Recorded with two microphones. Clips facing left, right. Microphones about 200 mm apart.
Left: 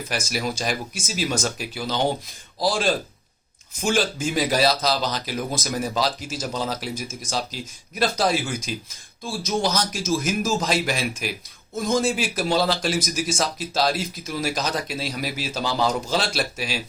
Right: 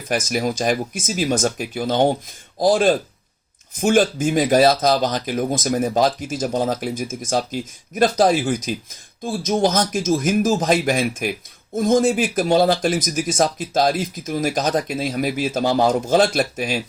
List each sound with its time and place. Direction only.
0.1 s speech: 45° right (ahead or behind)